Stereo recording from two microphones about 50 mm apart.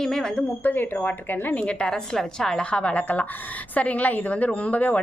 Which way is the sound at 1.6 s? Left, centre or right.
Left.